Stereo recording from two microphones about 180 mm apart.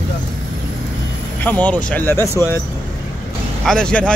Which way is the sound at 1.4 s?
10° left (ahead or behind).